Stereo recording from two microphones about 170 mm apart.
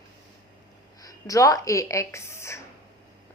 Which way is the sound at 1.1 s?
20° left (ahead or behind).